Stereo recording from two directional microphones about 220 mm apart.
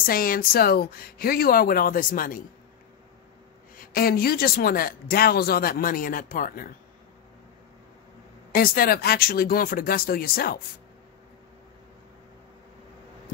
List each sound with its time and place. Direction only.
0.0 s speech: 40° left (ahead or behind)
3.7 s speech: 40° left (ahead or behind)
8.5 s speech: 40° left (ahead or behind)